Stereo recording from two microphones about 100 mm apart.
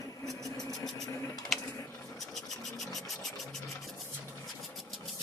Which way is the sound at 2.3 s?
Centre (ahead or behind).